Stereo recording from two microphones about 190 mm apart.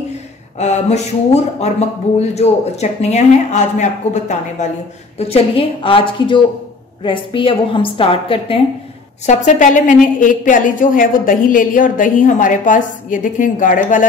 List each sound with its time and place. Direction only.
0.6 s a woman's voice: 35° left (ahead or behind)
9.2 s a woman's voice: 40° left (ahead or behind)